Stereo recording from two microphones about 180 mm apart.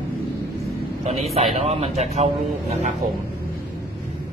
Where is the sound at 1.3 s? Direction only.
35° right (ahead or behind).